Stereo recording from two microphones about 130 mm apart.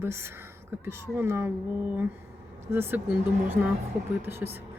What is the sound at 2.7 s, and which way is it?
Speech, 15° right (ahead or behind).